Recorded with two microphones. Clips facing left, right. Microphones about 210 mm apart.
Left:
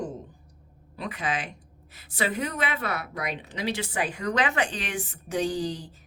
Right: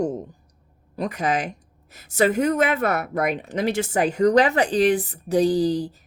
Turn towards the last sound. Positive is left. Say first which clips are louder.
# right 10 dB
turn(degrees=-35)  # may be behind; listen again after turning